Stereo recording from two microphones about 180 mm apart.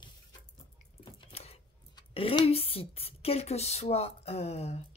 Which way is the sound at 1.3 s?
35° left (ahead or behind).